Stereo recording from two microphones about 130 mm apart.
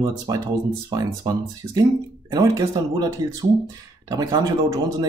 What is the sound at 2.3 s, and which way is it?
Speech, 30° right (ahead or behind).